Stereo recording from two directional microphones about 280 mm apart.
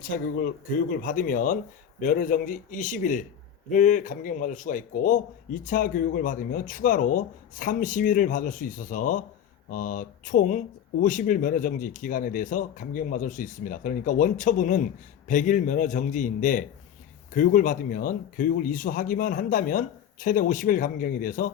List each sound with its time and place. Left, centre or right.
1.0 s speech: left